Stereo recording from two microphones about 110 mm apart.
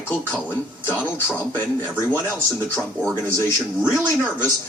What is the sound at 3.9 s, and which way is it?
Speech, 20° right (ahead or behind).